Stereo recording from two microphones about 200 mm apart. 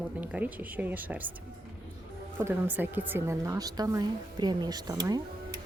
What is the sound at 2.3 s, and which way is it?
Speech, 10° right (ahead or behind).